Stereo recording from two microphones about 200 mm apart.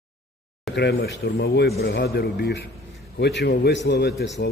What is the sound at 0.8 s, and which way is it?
A man's voice, 55° left (ahead or behind).